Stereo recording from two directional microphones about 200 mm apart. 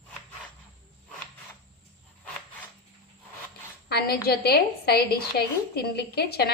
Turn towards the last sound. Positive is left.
turn(degrees=50)  # may be behind; listen again after turning